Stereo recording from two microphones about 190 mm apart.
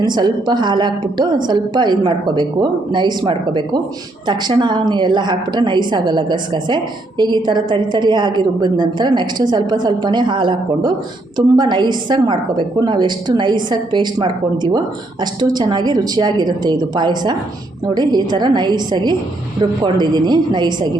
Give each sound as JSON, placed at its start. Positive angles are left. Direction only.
{"t": 0.0, "sound": "a woman's voice", "side_deg": -20}